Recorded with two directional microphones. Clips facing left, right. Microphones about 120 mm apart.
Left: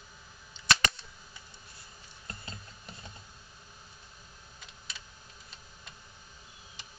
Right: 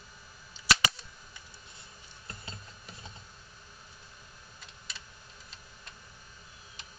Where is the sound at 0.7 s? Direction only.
5° right (ahead or behind).